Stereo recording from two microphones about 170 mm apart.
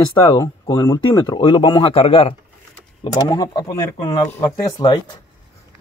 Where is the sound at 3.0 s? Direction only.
25° left (ahead or behind).